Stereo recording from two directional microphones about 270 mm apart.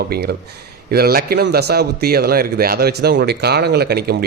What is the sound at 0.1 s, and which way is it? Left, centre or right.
Speech, right.